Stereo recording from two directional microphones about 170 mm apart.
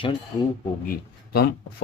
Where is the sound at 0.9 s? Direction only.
65° left (ahead or behind).